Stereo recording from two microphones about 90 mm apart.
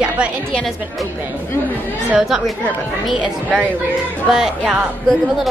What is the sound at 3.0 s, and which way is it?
A woman's voice, centre (ahead or behind).